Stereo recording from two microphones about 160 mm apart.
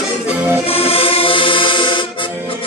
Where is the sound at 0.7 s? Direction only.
35° left (ahead or behind).